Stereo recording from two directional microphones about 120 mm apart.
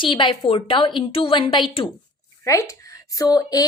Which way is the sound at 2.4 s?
25° left (ahead or behind).